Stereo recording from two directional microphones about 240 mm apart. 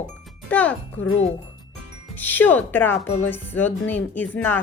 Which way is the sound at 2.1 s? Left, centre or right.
Centre.